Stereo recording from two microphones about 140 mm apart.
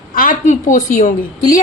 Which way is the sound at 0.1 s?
75° left (ahead or behind).